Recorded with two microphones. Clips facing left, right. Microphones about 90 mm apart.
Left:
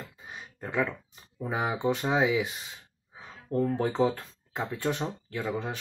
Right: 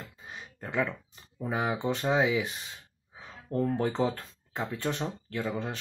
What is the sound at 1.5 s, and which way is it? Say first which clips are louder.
Speech: left 1 dB; 15° left (ahead or behind).